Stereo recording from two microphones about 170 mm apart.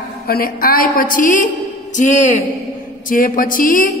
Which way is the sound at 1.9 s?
45° left (ahead or behind).